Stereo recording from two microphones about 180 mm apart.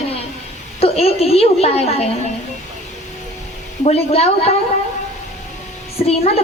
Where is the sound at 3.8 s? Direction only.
35° left (ahead or behind).